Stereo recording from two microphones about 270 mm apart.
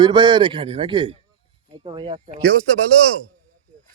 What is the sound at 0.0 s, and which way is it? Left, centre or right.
A man's voice, centre.